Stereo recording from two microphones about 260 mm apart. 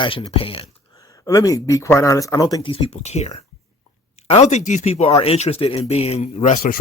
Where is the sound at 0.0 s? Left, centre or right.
Centre.